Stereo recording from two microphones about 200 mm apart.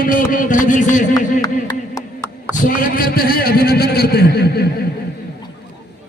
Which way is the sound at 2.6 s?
45° left (ahead or behind).